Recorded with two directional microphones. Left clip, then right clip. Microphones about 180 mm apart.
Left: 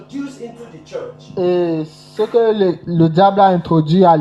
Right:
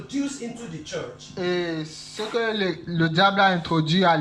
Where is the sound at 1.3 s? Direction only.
45° left (ahead or behind).